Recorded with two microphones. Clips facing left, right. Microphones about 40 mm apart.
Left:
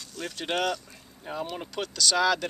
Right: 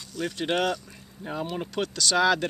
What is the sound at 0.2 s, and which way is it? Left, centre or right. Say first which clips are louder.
Speech: right 3 dB; centre.